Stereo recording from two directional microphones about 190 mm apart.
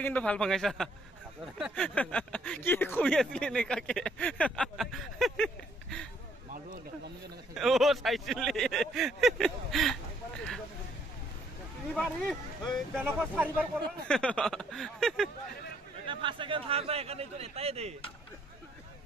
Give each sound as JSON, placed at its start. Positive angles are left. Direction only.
{"t": 0.0, "sound": "speech", "side_deg": 5}
{"t": 7.5, "sound": "speech", "side_deg": 0}
{"t": 11.9, "sound": "speech", "side_deg": 5}
{"t": 12.9, "sound": "speech", "side_deg": -10}
{"t": 14.0, "sound": "speech", "side_deg": 5}
{"t": 16.1, "sound": "a man's voice", "side_deg": -25}